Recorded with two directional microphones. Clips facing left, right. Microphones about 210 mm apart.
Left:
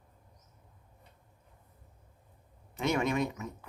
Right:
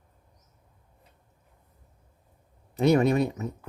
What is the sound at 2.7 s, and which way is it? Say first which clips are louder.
Speech: right 9 dB; 35° right (ahead or behind).